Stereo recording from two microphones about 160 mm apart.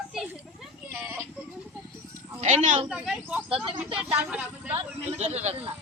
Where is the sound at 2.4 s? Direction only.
50° right (ahead or behind).